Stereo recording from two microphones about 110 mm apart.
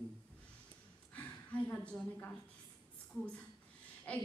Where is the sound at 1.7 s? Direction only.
15° left (ahead or behind).